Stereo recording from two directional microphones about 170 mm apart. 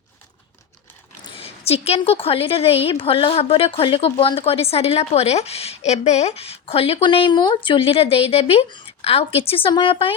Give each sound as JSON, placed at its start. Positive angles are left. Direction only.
{"t": 1.2, "sound": "a woman's voice", "side_deg": 35}